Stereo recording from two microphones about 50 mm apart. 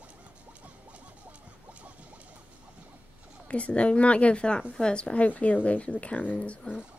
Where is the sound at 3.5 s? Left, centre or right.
Left.